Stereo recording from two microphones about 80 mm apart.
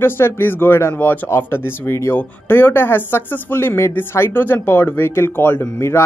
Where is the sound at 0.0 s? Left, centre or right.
Left.